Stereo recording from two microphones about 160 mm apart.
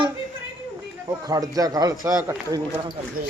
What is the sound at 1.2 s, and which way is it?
Speech, 20° right (ahead or behind).